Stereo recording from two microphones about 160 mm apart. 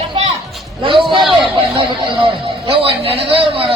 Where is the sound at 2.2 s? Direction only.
35° right (ahead or behind).